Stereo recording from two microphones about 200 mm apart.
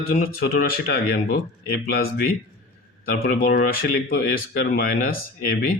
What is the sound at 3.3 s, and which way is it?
Speech, 45° left (ahead or behind).